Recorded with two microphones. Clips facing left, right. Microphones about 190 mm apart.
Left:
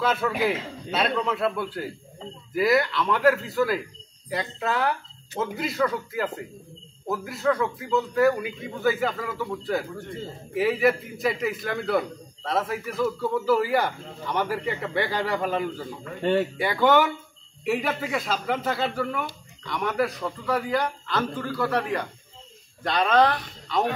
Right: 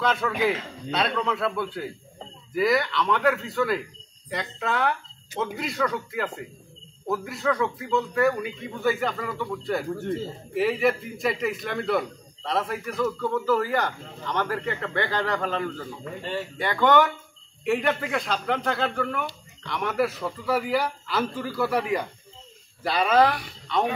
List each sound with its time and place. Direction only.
0.0 s a man's voice: 5° left (ahead or behind)
16.2 s speech: 60° left (ahead or behind)
16.5 s a man's voice: 10° left (ahead or behind); by 23.5 s 5° right (ahead or behind)